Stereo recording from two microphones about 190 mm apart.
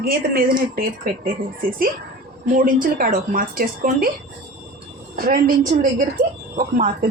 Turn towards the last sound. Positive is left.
turn(degrees=-40)  # may be behind; listen again after turning